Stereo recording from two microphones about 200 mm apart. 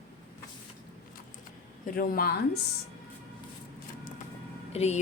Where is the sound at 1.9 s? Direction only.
45° left (ahead or behind).